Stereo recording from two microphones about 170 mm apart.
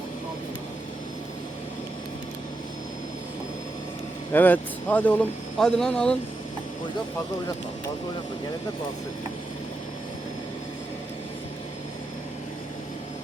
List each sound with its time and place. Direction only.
4.3 s speech: 10° left (ahead or behind)